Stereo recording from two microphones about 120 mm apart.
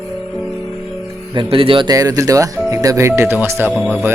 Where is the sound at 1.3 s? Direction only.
45° right (ahead or behind).